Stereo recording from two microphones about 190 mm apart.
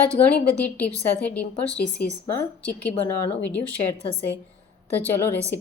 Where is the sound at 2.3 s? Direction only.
10° left (ahead or behind).